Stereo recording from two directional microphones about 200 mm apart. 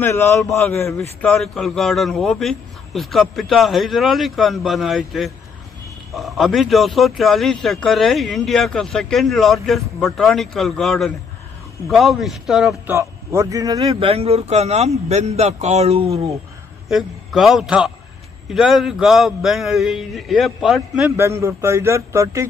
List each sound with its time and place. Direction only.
0.0 s a man's voice: 10° left (ahead or behind)
12.9 s speech: 15° right (ahead or behind); by 16.2 s 30° right (ahead or behind)
16.9 s speech: centre (ahead or behind)